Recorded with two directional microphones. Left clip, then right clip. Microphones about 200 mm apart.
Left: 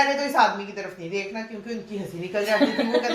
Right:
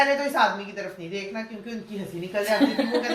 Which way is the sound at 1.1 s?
20° right (ahead or behind).